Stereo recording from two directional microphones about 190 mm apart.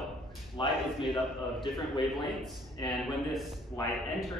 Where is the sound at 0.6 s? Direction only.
25° left (ahead or behind).